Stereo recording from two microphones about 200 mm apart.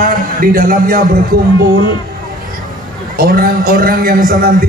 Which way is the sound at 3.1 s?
45° right (ahead or behind).